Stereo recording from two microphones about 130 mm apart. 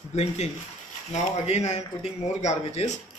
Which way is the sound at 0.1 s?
55° left (ahead or behind).